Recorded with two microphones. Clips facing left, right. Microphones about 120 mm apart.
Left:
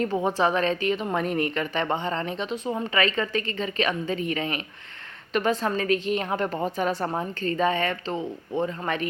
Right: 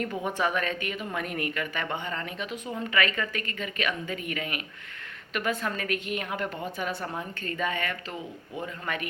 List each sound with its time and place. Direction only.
0.0 s a woman's voice: 30° left (ahead or behind)